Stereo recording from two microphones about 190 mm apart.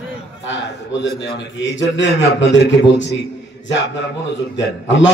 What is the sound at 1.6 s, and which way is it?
A man's voice, 75° left (ahead or behind).